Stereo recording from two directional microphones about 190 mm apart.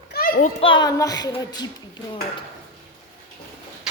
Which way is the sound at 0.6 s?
25° left (ahead or behind).